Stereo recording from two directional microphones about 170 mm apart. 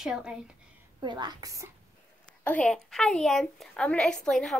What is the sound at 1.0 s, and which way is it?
Speech, 25° right (ahead or behind).